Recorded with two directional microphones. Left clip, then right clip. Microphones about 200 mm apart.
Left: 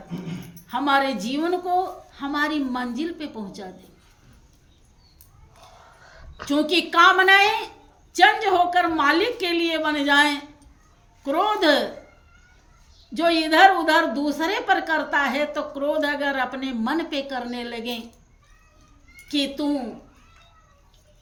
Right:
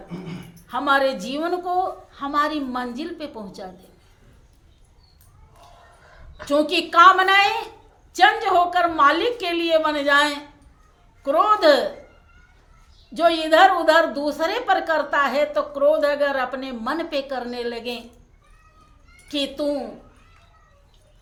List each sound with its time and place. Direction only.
0.7 s a woman's voice: 20° right (ahead or behind)
6.5 s a woman's voice: 20° right (ahead or behind)
13.1 s a woman's voice: 20° right (ahead or behind)
19.3 s a woman's voice: 20° right (ahead or behind)